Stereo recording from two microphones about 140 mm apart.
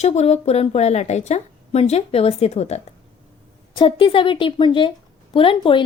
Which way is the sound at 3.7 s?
35° left (ahead or behind).